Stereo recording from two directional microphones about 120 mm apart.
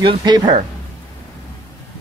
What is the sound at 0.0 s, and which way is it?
Speech, 40° right (ahead or behind).